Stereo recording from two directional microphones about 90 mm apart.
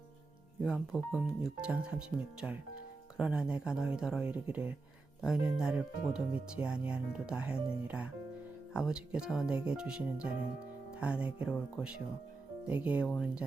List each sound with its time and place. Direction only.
0.6 s speech: 5° right (ahead or behind)
10.9 s music: 10° right (ahead or behind)
11.3 s speech: 10° right (ahead or behind)